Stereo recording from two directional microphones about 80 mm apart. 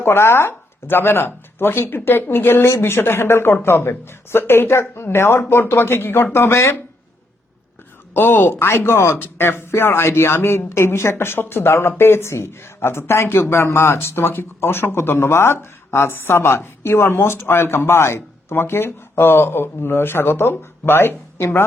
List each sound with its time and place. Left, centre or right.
0.0 s speech: left
8.1 s speech: left